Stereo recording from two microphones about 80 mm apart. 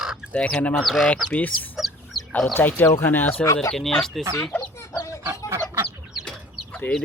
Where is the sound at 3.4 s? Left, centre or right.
Left.